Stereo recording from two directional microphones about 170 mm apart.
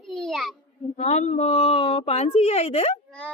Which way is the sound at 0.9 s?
45° left (ahead or behind).